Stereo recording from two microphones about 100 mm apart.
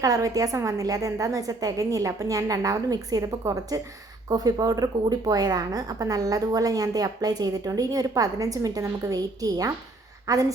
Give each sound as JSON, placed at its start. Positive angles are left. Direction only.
{"t": 0.0, "sound": "a woman's voice", "side_deg": -35}